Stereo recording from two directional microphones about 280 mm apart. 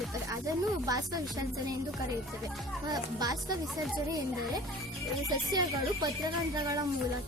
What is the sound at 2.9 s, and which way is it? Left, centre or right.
Speech, centre.